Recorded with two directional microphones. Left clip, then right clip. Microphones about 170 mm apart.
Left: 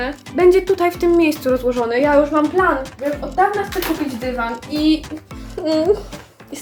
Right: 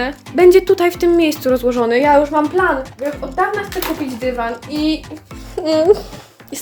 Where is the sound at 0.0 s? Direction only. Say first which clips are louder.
Right 3 dB; 55° right (ahead or behind).